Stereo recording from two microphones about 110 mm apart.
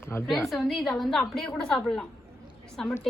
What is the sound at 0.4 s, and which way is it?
A woman's voice, centre (ahead or behind).